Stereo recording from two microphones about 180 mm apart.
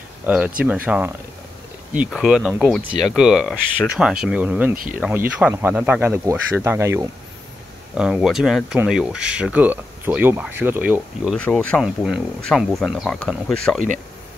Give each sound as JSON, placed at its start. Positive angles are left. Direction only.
{"t": 0.2, "sound": "speech", "side_deg": -5}
{"t": 4.7, "sound": "speech", "side_deg": -50}
{"t": 5.4, "sound": "speech", "side_deg": -10}
{"t": 7.9, "sound": "speech", "side_deg": -5}
{"t": 11.3, "sound": "speech", "side_deg": 5}